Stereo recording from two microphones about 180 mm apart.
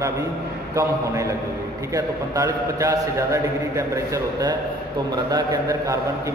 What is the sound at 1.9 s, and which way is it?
A man's voice, 20° right (ahead or behind).